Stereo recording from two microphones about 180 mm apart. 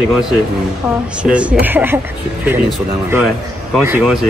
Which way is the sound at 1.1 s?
5° right (ahead or behind).